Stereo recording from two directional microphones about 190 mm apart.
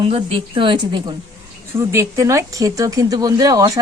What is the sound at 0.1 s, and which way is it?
A woman's voice, 30° right (ahead or behind).